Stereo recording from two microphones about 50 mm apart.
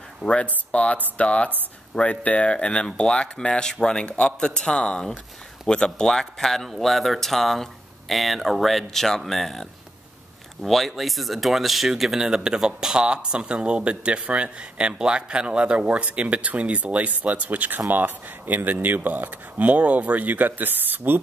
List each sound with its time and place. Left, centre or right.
0.2 s a man's voice: centre; by 21.2 s right